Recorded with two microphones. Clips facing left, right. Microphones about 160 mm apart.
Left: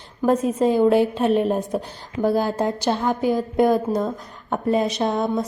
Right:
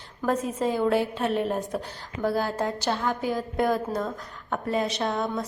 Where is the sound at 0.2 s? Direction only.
20° left (ahead or behind).